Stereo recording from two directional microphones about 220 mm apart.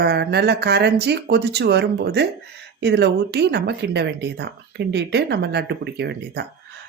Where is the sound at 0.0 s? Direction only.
50° right (ahead or behind).